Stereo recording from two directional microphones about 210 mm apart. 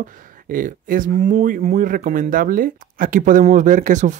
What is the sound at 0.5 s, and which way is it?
Speech, 40° right (ahead or behind).